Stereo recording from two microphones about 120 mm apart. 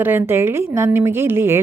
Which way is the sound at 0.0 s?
20° right (ahead or behind).